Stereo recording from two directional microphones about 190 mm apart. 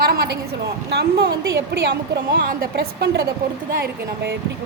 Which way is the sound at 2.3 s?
55° right (ahead or behind).